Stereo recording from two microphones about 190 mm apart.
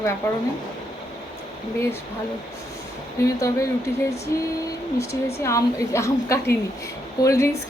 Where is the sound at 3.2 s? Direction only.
15° left (ahead or behind).